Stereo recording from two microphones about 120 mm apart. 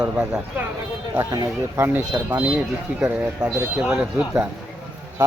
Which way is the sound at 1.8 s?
15° right (ahead or behind).